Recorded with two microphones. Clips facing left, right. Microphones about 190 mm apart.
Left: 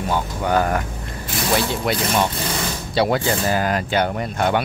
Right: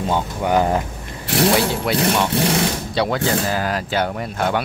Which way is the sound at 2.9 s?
5° left (ahead or behind).